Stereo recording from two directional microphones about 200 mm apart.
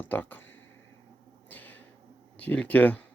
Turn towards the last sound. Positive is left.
turn(degrees=10)  # may be behind; listen again after turning